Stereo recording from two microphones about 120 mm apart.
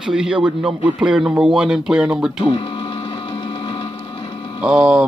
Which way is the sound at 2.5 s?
45° left (ahead or behind).